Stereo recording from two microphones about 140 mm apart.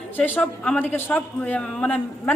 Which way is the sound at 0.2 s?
10° left (ahead or behind).